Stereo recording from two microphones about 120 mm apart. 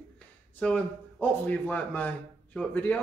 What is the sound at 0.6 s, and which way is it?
A man's voice, 10° left (ahead or behind).